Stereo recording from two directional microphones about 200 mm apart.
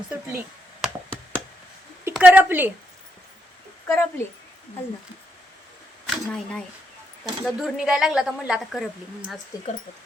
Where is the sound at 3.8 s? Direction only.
10° left (ahead or behind).